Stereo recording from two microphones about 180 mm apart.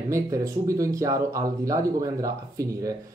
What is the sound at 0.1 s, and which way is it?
Speech, 15° right (ahead or behind).